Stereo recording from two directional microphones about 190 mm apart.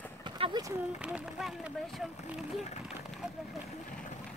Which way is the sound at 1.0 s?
5° right (ahead or behind).